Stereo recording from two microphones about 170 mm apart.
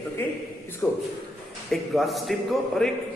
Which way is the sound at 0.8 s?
15° left (ahead or behind).